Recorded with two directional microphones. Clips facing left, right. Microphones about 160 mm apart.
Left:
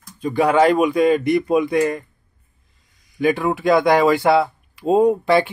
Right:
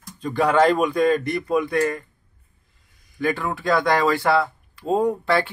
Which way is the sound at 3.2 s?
15° left (ahead or behind).